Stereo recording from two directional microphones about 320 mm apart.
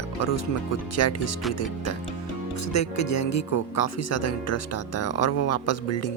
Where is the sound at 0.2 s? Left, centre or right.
Left.